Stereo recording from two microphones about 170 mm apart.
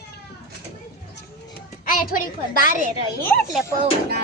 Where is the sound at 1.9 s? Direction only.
55° left (ahead or behind).